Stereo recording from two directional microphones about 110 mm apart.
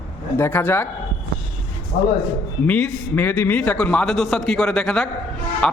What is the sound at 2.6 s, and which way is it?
A man's voice, 10° left (ahead or behind).